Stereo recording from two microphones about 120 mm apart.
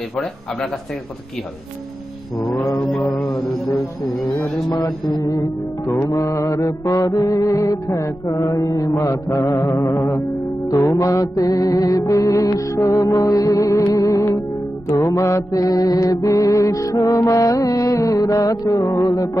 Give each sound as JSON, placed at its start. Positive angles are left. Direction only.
{"t": 3.0, "sound": "music", "side_deg": 25}
{"t": 4.7, "sound": "mantra", "side_deg": 30}